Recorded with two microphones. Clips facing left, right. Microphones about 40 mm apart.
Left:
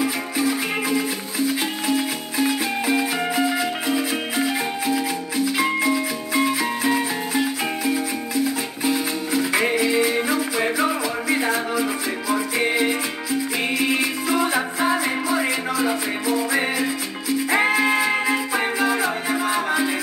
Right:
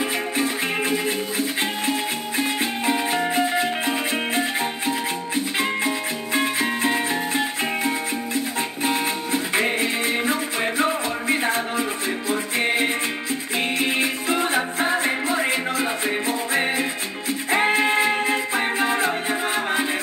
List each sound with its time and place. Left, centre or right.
0.0 s music: right